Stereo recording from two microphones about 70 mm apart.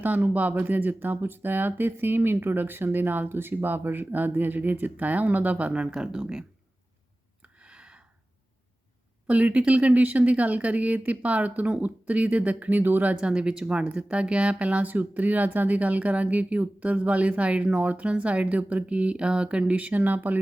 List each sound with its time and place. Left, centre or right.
0.0 s speech: right
7.4 s a sound: centre
9.2 s speech: centre
13.1 s speech: centre